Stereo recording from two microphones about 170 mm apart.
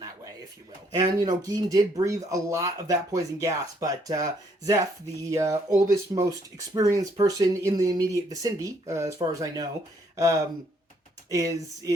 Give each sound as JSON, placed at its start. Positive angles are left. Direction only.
{"t": 0.9, "sound": "speech", "side_deg": -20}